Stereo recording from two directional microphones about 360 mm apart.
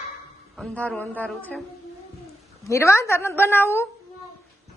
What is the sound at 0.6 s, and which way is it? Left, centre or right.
A woman's voice, centre.